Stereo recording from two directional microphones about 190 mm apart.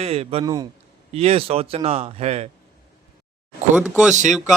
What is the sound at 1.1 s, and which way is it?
A man's voice, 30° right (ahead or behind).